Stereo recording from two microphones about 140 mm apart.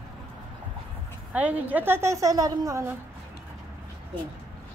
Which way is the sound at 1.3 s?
10° right (ahead or behind).